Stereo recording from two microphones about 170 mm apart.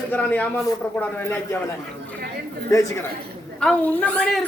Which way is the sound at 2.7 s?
15° left (ahead or behind).